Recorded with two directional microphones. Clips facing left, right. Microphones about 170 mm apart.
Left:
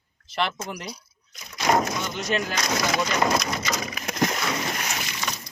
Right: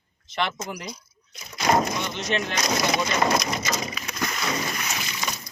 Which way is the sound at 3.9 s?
50° left (ahead or behind).